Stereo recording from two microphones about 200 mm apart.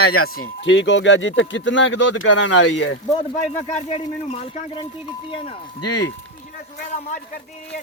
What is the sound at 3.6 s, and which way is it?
Speech, 35° left (ahead or behind).